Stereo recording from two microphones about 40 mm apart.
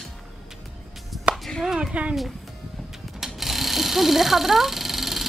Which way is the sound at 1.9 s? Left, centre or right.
Right.